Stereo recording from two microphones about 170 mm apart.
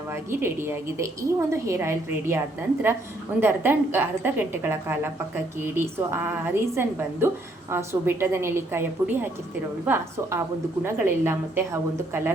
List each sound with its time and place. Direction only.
0.1 s a woman's voice: 15° right (ahead or behind)
3.4 s a woman's voice: 15° right (ahead or behind)